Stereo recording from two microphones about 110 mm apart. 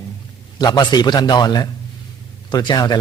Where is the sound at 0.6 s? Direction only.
40° left (ahead or behind).